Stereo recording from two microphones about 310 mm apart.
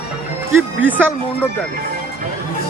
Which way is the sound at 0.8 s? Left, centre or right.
Centre.